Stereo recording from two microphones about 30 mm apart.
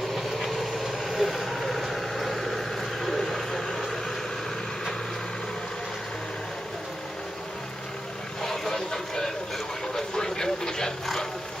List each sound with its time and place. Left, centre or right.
0.1 s vehicle: centre
8.4 s vehicle: centre